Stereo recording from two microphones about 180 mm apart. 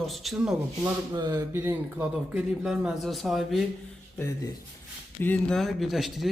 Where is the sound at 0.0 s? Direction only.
Centre (ahead or behind).